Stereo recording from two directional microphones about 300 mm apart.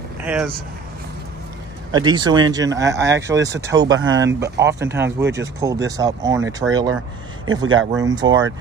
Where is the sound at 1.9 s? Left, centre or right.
Centre.